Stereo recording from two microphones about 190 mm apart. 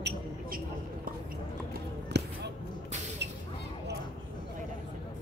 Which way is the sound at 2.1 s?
60° right (ahead or behind).